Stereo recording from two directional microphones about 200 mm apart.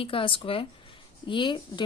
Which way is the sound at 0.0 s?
25° left (ahead or behind).